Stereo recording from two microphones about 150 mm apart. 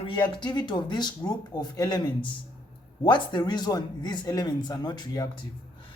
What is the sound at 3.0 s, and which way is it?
A man's voice, 30° left (ahead or behind).